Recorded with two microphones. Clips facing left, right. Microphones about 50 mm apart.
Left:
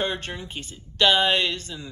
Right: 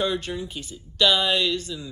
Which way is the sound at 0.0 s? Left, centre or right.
Left.